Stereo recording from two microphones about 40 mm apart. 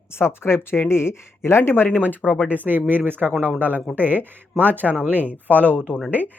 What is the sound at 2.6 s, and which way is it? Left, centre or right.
Speech, right.